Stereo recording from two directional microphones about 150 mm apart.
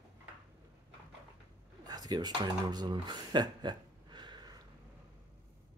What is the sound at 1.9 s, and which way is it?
Speech, 25° right (ahead or behind).